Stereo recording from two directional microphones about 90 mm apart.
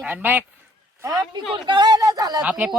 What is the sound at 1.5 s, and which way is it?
Speech, 55° right (ahead or behind).